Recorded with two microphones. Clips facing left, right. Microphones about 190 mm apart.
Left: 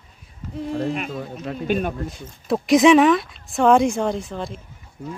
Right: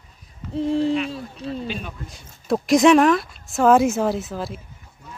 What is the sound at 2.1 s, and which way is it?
Speech, centre (ahead or behind).